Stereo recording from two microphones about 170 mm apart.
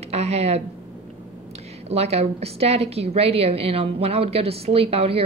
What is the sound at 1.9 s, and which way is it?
Speech, 40° right (ahead or behind).